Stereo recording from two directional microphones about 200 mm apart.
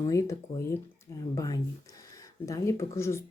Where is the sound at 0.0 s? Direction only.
15° left (ahead or behind).